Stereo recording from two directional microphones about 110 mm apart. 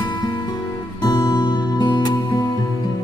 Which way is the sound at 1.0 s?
40° left (ahead or behind).